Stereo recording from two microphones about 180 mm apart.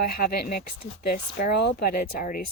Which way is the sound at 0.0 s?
55° left (ahead or behind).